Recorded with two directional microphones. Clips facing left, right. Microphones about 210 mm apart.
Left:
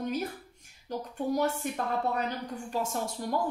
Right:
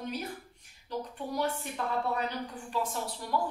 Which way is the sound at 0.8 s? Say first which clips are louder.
Left 5 dB; 45° left (ahead or behind).